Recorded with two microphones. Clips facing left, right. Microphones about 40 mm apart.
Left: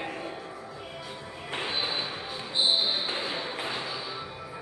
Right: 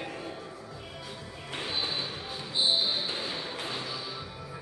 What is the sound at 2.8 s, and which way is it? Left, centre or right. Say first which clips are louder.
Basketball bounce: left 2 dB; centre.